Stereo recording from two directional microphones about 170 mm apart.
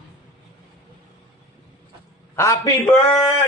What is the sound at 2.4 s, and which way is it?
Speech, 15° left (ahead or behind).